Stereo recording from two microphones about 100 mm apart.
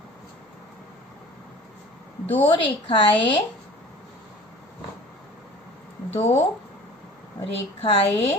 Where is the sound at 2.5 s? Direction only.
60° left (ahead or behind).